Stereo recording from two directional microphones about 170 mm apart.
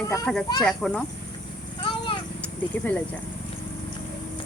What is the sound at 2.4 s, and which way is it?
Cricket, 10° left (ahead or behind).